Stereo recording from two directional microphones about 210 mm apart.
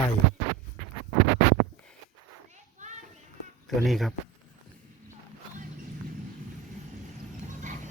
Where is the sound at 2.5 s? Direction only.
35° right (ahead or behind).